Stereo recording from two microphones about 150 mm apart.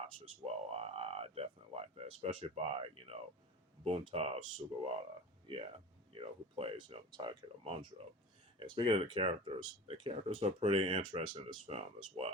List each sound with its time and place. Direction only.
0.4 s speech: 45° right (ahead or behind)
6.1 s speech: 40° right (ahead or behind)